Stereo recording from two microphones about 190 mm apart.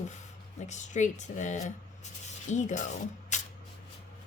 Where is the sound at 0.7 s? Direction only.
40° left (ahead or behind).